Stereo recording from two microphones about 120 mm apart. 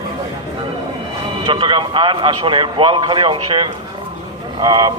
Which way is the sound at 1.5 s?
45° right (ahead or behind).